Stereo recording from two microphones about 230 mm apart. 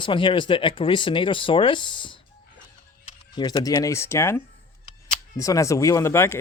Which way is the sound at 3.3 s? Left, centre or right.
Centre.